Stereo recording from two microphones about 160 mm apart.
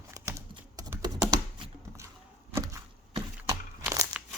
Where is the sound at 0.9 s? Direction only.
20° right (ahead or behind).